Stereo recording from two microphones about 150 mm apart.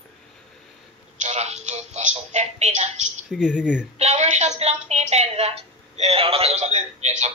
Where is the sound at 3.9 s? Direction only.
50° right (ahead or behind).